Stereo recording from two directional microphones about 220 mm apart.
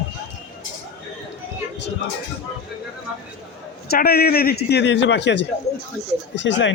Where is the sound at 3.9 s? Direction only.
45° left (ahead or behind).